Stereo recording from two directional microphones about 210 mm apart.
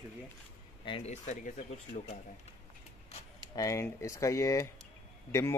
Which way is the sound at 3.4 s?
15° left (ahead or behind).